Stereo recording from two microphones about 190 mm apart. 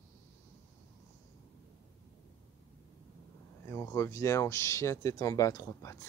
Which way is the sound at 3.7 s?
15° left (ahead or behind).